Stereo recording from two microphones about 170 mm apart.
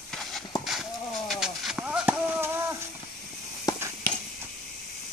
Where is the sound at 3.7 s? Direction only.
20° left (ahead or behind).